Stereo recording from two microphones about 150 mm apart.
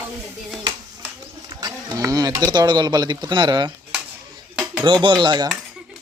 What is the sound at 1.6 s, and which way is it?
Speech, 25° right (ahead or behind).